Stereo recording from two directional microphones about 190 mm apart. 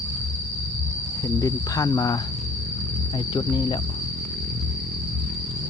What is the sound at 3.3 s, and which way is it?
Cricket, 25° left (ahead or behind).